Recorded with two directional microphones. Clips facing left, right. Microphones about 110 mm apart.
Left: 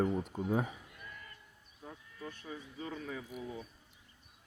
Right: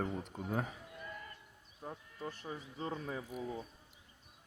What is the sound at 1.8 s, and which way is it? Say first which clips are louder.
Speech: right 3 dB; 35° right (ahead or behind).